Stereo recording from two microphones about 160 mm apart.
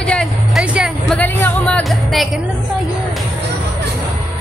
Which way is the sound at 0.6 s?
5° right (ahead or behind).